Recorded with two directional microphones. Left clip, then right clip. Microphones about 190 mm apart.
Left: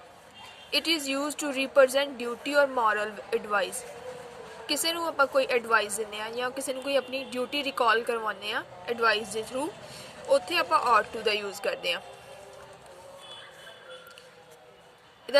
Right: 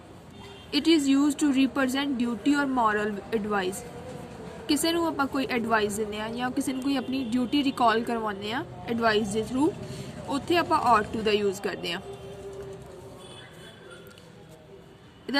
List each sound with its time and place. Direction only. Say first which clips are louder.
0.7 s a woman's voice: right 4 dB; 15° left (ahead or behind)